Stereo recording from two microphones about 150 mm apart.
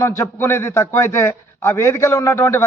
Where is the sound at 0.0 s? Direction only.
15° left (ahead or behind).